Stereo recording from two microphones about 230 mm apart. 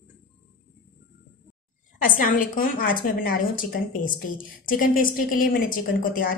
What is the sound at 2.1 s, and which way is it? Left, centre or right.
Speech, left.